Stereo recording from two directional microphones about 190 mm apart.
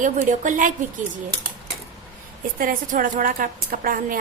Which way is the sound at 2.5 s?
45° right (ahead or behind).